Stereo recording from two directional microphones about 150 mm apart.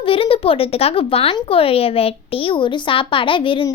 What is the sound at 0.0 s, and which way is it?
Speech, 35° left (ahead or behind).